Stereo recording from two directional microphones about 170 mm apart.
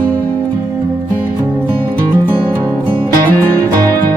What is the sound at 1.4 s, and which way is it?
Music, 15° right (ahead or behind).